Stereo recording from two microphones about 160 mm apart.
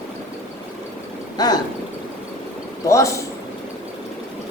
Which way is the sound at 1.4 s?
25° left (ahead or behind).